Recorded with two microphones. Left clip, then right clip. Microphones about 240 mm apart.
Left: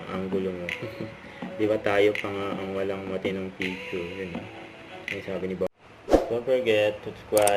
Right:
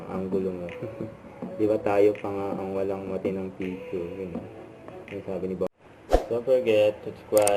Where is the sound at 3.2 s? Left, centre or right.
Centre.